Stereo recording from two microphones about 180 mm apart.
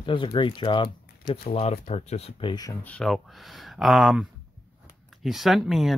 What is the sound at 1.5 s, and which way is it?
Speech, 35° left (ahead or behind).